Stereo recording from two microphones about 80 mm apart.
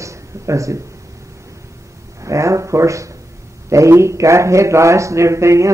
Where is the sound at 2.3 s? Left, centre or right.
Right.